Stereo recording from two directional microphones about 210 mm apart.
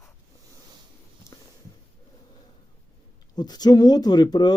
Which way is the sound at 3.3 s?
20° left (ahead or behind).